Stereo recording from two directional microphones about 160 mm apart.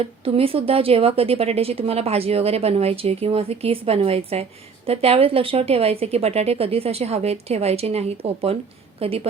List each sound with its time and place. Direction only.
0.0 s a woman's voice: 35° right (ahead or behind)